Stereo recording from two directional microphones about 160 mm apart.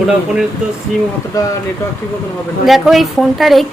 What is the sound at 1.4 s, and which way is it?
Speech, 20° left (ahead or behind).